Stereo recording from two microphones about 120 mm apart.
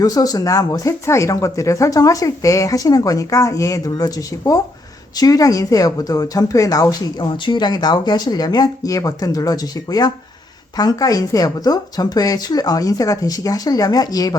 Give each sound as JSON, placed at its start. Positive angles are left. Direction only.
{"t": 0.0, "sound": "speech", "side_deg": 30}
{"t": 7.2, "sound": "a woman's voice", "side_deg": 40}